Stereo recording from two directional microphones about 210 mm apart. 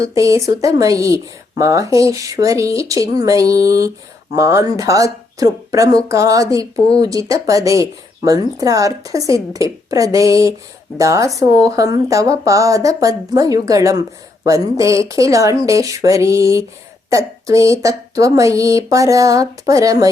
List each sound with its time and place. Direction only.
0.0 s speech: 15° right (ahead or behind)